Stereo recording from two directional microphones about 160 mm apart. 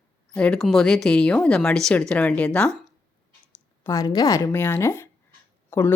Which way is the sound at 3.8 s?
20° left (ahead or behind).